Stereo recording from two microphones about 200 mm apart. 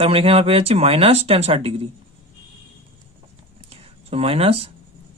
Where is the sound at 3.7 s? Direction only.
30° right (ahead or behind).